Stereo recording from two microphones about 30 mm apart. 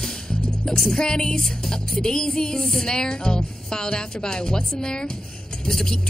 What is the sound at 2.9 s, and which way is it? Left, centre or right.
Speech, left.